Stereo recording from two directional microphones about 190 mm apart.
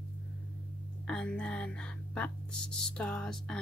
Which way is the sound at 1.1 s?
5° left (ahead or behind).